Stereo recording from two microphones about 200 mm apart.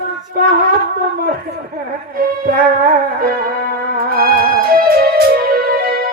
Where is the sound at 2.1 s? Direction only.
45° right (ahead or behind).